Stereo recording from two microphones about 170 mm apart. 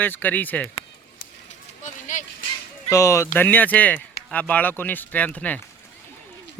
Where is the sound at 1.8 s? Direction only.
45° left (ahead or behind).